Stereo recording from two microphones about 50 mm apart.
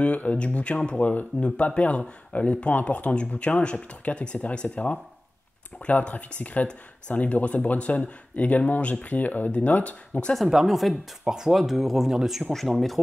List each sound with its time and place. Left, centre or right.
0.0 s speech: left
10.3 s speech: centre
11.5 s speech: centre